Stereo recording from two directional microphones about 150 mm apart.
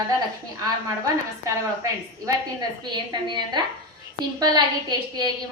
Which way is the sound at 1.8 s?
25° right (ahead or behind).